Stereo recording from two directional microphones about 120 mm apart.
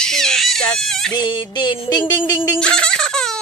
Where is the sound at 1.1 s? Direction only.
40° left (ahead or behind).